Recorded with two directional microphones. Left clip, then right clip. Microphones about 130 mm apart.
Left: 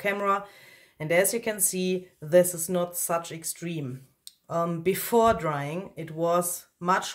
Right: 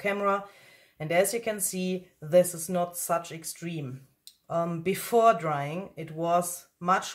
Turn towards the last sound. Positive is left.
turn(degrees=25)  # may be behind; listen again after turning